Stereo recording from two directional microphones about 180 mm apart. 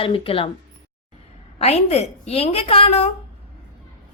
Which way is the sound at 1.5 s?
35° left (ahead or behind).